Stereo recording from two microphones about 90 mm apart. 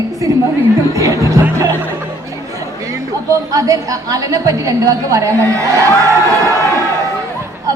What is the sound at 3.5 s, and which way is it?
A woman's voice, 40° right (ahead or behind).